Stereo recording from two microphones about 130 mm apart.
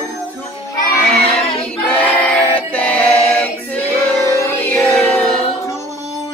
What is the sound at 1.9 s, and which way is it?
Choir, 10° left (ahead or behind).